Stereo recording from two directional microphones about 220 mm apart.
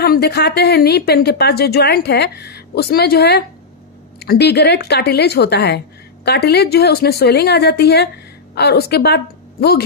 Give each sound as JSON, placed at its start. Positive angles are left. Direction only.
{"t": 0.0, "sound": "a woman's voice", "side_deg": 45}